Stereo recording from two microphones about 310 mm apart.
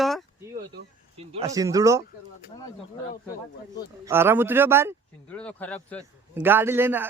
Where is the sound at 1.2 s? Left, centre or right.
Centre.